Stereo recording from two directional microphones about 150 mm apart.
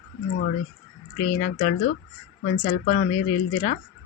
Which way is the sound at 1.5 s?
50° left (ahead or behind).